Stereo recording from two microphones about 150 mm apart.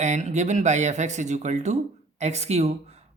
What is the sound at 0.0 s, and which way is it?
Speech, 50° right (ahead or behind).